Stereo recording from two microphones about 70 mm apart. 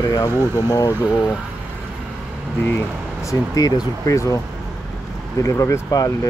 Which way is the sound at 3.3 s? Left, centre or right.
Left.